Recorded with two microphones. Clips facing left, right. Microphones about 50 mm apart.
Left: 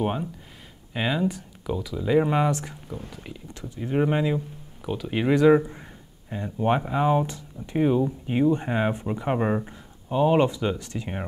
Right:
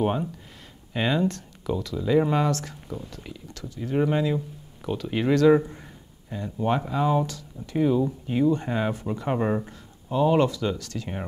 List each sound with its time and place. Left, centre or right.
0.0 s speech: centre
4.8 s speech: centre